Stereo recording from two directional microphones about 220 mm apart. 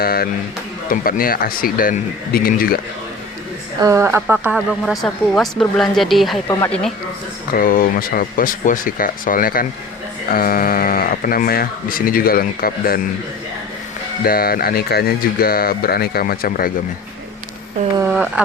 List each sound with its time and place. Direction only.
0.0 s speech: 45° left (ahead or behind)
3.8 s speech: 15° right (ahead or behind); by 6.9 s 5° left (ahead or behind)
7.5 s speech: 40° left (ahead or behind)
14.3 s speech: 40° left (ahead or behind)
17.9 s a sound: 5° right (ahead or behind)